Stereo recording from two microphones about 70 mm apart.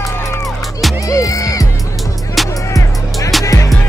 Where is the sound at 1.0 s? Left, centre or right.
Left.